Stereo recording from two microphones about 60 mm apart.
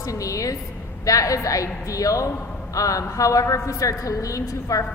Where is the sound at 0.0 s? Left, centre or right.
Left.